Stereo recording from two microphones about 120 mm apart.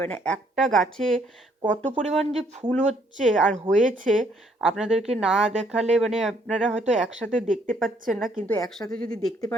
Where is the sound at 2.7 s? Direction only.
80° right.